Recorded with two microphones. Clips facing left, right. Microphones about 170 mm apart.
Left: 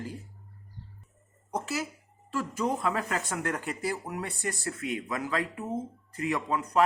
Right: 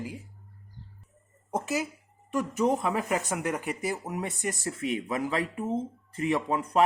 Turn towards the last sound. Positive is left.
turn(degrees=-25)  # may be behind; listen again after turning